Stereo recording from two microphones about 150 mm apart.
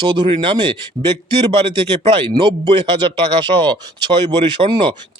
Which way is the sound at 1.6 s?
35° right (ahead or behind).